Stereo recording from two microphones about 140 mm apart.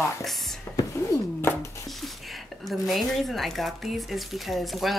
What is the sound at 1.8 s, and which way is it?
Speech, centre (ahead or behind).